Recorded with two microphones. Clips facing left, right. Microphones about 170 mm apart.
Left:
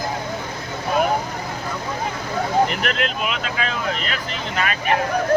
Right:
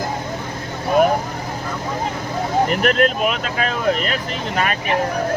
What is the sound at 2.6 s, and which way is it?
Speech, 45° right (ahead or behind).